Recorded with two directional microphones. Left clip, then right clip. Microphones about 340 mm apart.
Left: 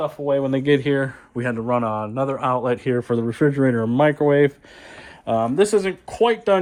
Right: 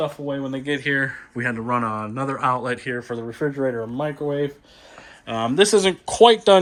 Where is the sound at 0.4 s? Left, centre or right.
Left.